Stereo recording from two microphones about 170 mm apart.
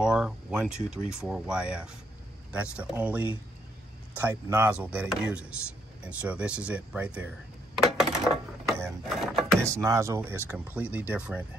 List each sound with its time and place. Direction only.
0.0 s speech: 5° right (ahead or behind)
4.2 s speech: 15° right (ahead or behind)
7.8 s coin: centre (ahead or behind)
8.6 s a sound: 15° right (ahead or behind)
9.0 s a sound: centre (ahead or behind)
9.6 s speech: 15° right (ahead or behind)